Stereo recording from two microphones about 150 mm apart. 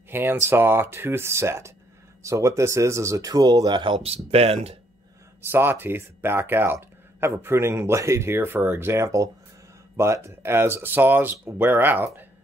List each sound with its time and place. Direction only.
0.1 s speech: 15° right (ahead or behind); by 4.7 s 45° right (ahead or behind)
5.5 s speech: 15° right (ahead or behind)